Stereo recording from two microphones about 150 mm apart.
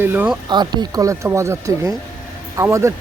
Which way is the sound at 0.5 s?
30° right (ahead or behind).